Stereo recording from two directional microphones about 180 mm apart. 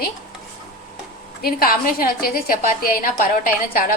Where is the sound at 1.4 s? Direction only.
55° left (ahead or behind).